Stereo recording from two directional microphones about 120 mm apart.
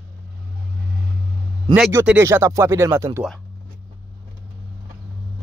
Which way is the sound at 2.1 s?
20° right (ahead or behind).